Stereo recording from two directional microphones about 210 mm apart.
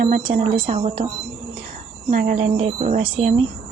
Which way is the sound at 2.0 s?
35° right (ahead or behind).